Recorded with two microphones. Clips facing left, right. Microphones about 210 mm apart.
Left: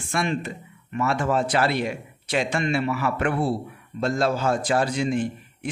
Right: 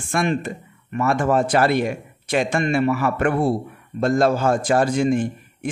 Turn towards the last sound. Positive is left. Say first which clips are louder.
# right 3 dB
turn(degrees=-50)  # may be behind; listen again after turning